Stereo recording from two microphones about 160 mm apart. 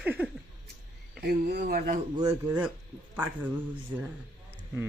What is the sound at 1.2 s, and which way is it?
Speech, 90° right.